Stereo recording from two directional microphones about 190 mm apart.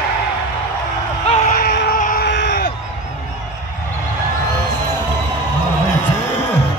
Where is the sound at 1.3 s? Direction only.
45° left (ahead or behind).